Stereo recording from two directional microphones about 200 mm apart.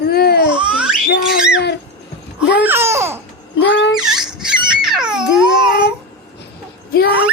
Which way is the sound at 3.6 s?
65° left (ahead or behind).